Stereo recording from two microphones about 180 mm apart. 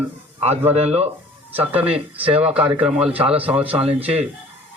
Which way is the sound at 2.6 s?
5° right (ahead or behind).